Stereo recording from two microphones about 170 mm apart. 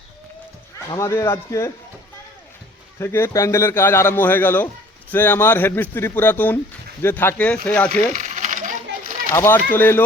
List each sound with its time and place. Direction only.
0.9 s a man's voice: 15° left (ahead or behind)
3.0 s a man's voice: 15° left (ahead or behind)
8.1 s coin: 45° right (ahead or behind)
9.3 s a man's voice: 15° left (ahead or behind)